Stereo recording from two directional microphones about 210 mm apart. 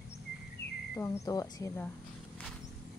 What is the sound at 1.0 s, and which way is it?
Speech, 15° left (ahead or behind).